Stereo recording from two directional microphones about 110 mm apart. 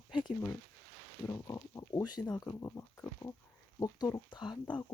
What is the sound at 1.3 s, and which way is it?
Speech, 25° left (ahead or behind).